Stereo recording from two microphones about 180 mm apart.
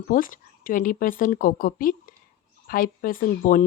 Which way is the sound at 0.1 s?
50° left (ahead or behind).